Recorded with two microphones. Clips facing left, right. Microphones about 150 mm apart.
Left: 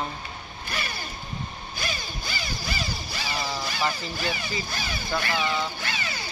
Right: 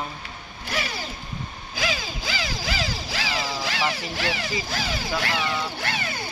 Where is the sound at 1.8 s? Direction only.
90° right.